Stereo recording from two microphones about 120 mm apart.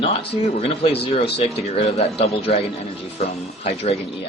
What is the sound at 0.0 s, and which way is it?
Speech, 50° left (ahead or behind).